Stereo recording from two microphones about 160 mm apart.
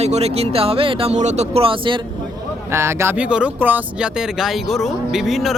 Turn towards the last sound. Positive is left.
turn(degrees=0)  # may be behind; listen again after turning